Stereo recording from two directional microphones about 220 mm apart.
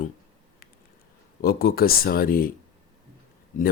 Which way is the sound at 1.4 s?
40° left (ahead or behind).